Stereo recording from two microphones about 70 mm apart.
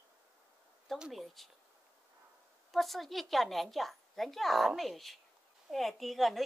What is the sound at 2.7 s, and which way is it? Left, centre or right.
Speech, centre.